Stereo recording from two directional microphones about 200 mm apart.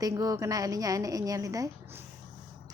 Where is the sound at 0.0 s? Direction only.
15° right (ahead or behind).